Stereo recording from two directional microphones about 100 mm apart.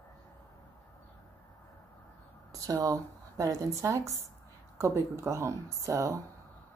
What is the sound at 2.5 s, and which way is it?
Speech, 40° right (ahead or behind).